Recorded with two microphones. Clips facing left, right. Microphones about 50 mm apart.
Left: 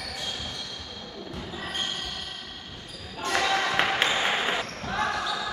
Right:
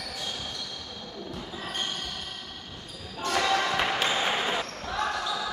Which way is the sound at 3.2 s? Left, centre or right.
Centre.